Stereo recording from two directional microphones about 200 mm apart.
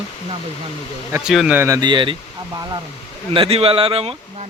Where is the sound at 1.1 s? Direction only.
10° right (ahead or behind).